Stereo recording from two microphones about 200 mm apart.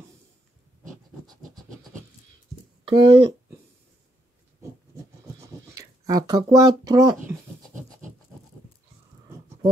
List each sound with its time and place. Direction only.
1.2 s scratch: 20° right (ahead or behind)
2.8 s speech: 25° right (ahead or behind)
5.8 s speech: 20° right (ahead or behind)